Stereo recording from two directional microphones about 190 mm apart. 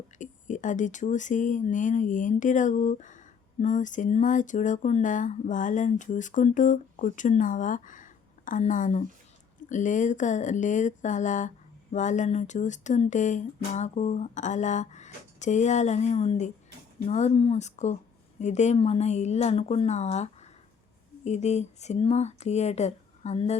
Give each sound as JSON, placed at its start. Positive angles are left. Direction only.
{"t": 0.2, "sound": "speech", "side_deg": 40}